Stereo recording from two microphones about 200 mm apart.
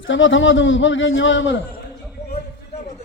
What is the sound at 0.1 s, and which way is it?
A man's voice, 70° left (ahead or behind).